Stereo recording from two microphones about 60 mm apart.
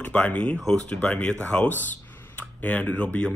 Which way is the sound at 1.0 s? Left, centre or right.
Centre.